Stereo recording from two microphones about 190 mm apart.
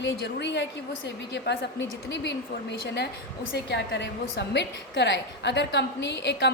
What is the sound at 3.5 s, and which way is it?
A woman's voice, 65° left (ahead or behind).